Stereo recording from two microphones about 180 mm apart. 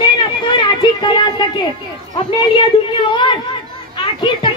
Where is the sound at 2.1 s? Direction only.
25° left (ahead or behind).